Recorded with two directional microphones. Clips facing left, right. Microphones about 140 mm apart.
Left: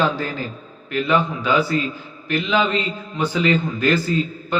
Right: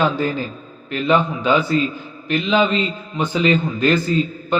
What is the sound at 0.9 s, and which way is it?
Speech, 25° right (ahead or behind).